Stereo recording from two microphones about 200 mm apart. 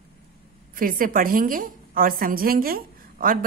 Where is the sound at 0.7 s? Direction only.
45° right (ahead or behind).